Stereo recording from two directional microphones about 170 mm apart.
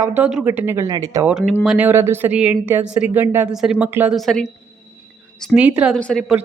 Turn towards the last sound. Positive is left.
turn(degrees=0)  # may be behind; listen again after turning